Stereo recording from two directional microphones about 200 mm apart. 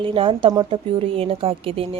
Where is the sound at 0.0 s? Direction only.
25° right (ahead or behind).